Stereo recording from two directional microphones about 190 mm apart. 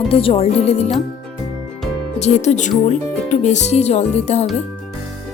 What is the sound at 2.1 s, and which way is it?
Speech, 35° left (ahead or behind).